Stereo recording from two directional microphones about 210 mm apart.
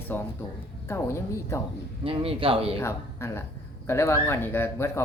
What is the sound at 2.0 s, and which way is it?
Speech, 25° right (ahead or behind).